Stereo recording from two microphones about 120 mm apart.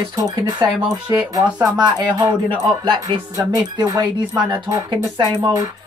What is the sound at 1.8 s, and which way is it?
Speech, 40° right (ahead or behind).